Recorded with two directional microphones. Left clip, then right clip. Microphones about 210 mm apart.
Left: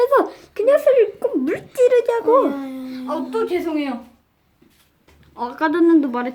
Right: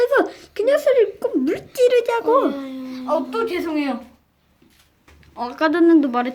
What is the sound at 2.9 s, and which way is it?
Speech, 10° right (ahead or behind).